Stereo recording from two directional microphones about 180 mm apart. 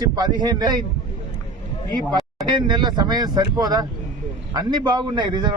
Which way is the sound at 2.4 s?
25° right (ahead or behind).